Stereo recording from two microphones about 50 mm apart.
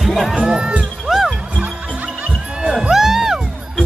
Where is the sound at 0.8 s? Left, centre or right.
Centre.